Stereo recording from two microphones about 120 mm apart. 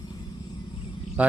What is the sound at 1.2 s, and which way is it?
Speech, 10° right (ahead or behind).